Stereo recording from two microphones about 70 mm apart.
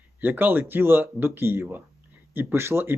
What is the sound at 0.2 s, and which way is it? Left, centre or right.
Speech, right.